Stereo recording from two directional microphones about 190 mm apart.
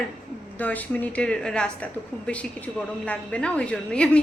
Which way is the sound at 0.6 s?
10° left (ahead or behind).